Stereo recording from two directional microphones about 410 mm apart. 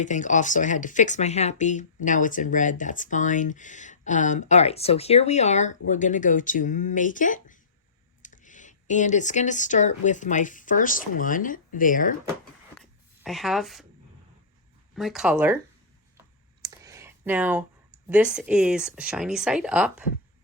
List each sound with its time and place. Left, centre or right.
0.0 s speech: centre
12.8 s a sound: centre
14.9 s speech: centre
16.6 s speech: centre